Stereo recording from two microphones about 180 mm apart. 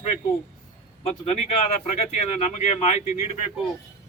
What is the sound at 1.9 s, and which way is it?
Speech, 40° left (ahead or behind).